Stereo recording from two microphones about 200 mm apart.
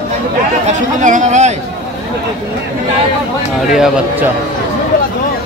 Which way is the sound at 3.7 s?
Centre (ahead or behind).